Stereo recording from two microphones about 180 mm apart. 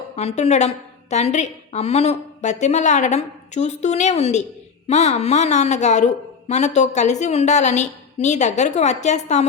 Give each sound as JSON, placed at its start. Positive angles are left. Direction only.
{"t": 0.2, "sound": "a woman's voice", "side_deg": 35}